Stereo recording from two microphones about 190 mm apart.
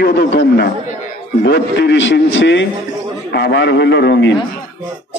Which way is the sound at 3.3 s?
65° left (ahead or behind).